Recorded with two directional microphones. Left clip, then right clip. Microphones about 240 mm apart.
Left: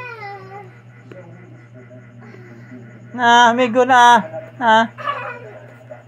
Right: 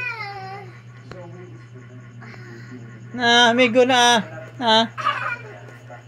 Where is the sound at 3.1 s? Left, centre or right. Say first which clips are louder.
Left 4 dB; centre.